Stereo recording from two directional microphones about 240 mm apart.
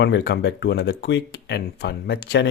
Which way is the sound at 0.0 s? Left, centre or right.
Left.